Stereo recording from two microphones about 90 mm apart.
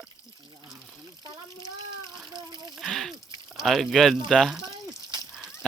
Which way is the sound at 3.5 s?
Centre (ahead or behind).